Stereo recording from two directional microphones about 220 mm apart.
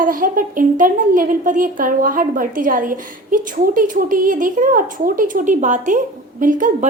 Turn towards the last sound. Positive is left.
turn(degrees=-35)  # may be behind; listen again after turning